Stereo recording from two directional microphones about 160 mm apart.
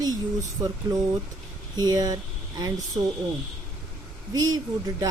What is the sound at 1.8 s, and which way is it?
Speech, 25° right (ahead or behind).